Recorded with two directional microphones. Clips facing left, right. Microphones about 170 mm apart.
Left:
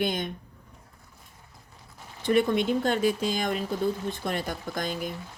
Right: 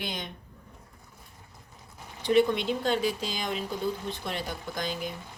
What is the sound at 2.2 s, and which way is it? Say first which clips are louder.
Speech: even; 50° left (ahead or behind).